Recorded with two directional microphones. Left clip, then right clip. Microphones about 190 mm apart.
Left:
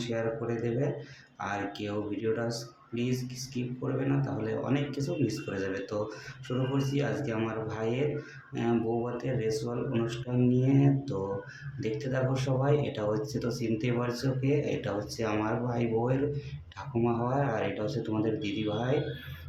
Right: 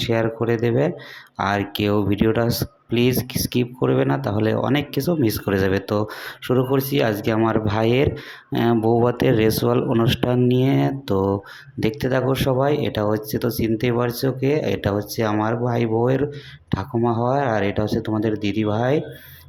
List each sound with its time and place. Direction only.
0.0 s speech: 45° right (ahead or behind)